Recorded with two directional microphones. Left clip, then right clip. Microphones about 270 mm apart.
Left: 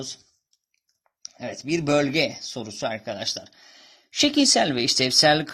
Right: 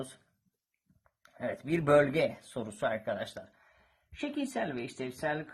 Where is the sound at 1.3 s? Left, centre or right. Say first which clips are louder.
Left 6 dB; centre.